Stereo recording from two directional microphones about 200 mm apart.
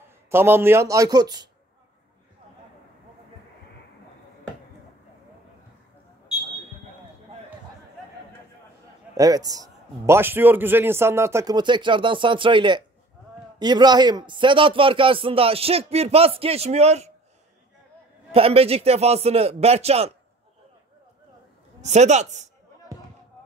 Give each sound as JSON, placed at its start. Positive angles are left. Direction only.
{"t": 0.3, "sound": "a man's voice", "side_deg": -10}
{"t": 9.1, "sound": "a man's voice", "side_deg": -15}
{"t": 18.3, "sound": "a man's voice", "side_deg": -30}
{"t": 21.8, "sound": "a man's voice", "side_deg": -35}